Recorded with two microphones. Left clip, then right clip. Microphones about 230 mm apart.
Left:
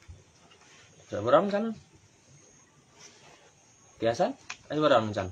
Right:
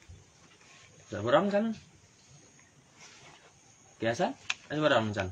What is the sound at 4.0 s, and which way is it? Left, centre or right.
Speech, centre.